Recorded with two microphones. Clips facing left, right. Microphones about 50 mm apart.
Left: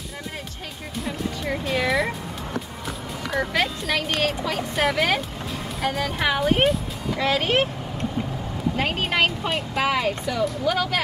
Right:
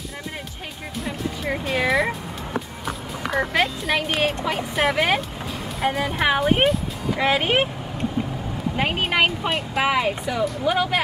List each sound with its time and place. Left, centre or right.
0.9 s speech: centre
3.3 s speech: centre
8.7 s speech: centre